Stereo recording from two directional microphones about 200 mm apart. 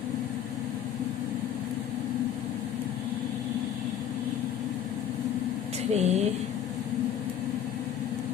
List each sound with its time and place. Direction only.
5.9 s speech: 35° right (ahead or behind)